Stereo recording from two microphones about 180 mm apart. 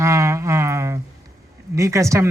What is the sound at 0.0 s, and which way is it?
Music, 15° right (ahead or behind).